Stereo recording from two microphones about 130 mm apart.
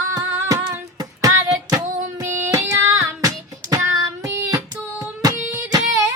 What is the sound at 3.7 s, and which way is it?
Child singing, 30° right (ahead or behind).